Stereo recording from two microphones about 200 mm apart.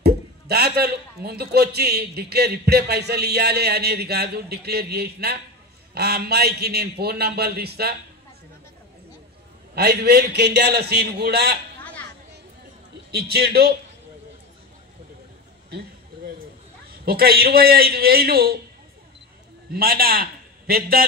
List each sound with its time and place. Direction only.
0.0 s a man's voice: 50° right (ahead or behind)
9.8 s a man's voice: 50° right (ahead or behind)
13.1 s a man's voice: 55° right (ahead or behind)
17.0 s a man's voice: 50° right (ahead or behind)
19.7 s a man's voice: 50° right (ahead or behind)